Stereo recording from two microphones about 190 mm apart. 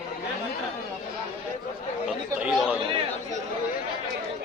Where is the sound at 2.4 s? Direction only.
5° right (ahead or behind).